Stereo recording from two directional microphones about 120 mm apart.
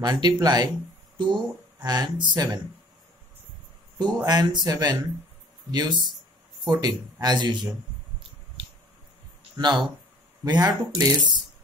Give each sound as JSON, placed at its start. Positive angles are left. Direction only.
{"t": 0.0, "sound": "speech", "side_deg": -35}
{"t": 4.0, "sound": "speech", "side_deg": -35}
{"t": 9.6, "sound": "speech", "side_deg": -40}